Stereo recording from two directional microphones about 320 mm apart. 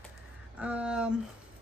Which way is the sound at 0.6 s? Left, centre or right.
Centre.